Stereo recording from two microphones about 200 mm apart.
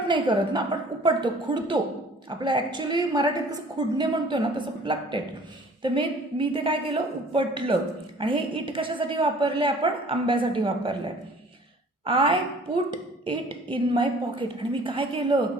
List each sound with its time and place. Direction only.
0.1 s a woman's voice: 25° right (ahead or behind)